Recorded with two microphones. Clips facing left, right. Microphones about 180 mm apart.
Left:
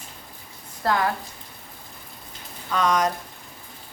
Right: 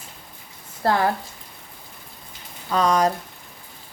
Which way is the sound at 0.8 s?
35° right (ahead or behind).